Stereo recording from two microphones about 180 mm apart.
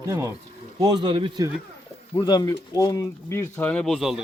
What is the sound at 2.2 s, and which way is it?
Speech, 25° left (ahead or behind).